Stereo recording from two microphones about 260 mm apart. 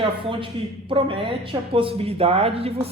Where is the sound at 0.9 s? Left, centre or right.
Centre.